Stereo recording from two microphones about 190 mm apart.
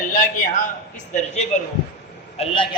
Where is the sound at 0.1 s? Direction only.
45° left (ahead or behind).